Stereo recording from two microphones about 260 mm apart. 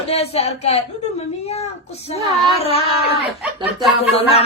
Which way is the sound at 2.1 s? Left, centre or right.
Left.